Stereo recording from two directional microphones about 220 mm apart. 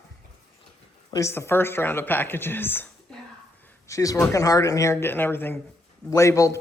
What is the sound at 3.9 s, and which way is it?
Speech, 15° left (ahead or behind).